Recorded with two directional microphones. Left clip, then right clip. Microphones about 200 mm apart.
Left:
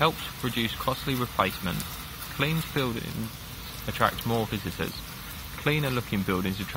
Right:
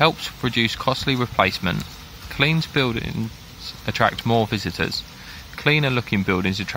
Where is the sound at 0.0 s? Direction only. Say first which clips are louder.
Right 7 dB; 40° right (ahead or behind).